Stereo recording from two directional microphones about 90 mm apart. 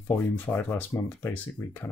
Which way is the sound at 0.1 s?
20° left (ahead or behind).